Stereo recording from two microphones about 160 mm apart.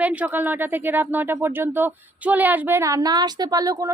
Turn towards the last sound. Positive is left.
turn(degrees=-20)  # may be behind; listen again after turning